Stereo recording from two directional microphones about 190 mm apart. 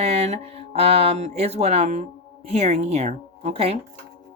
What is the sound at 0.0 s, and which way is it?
Speech, 35° right (ahead or behind).